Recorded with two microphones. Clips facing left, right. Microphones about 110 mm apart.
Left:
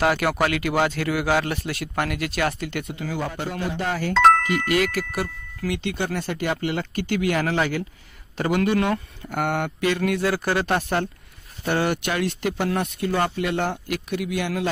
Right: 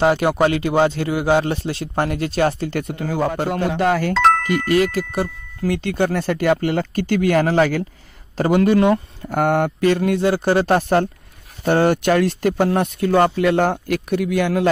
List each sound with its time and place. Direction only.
0.0 s a man's voice: 25° right (ahead or behind)
2.9 s speech: 50° right (ahead or behind)
3.4 s speech: 65° right (ahead or behind)
4.1 s speech: centre (ahead or behind)
4.6 s speech: 30° right (ahead or behind)
5.7 s speech: 40° right (ahead or behind)
13.0 s speech: 55° right (ahead or behind)